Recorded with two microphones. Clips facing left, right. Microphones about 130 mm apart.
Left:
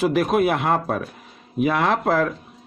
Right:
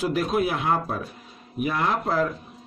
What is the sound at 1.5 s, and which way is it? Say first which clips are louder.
Speech: left 5 dB; 90° left.